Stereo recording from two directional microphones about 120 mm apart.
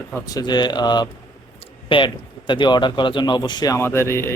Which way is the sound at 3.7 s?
20° left (ahead or behind).